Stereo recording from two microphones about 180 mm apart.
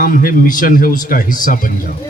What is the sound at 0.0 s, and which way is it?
A man's voice, 50° left (ahead or behind).